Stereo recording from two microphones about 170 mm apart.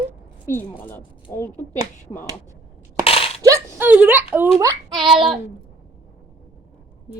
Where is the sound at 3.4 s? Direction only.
15° right (ahead or behind).